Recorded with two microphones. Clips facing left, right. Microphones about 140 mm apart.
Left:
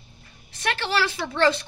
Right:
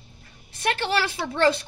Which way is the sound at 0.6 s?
50° right (ahead or behind).